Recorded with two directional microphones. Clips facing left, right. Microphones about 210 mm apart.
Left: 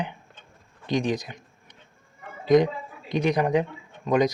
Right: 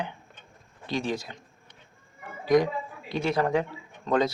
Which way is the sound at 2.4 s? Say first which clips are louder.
Left 3 dB; 20° left (ahead or behind).